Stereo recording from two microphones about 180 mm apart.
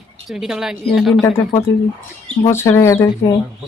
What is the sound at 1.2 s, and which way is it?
Speech, 15° left (ahead or behind).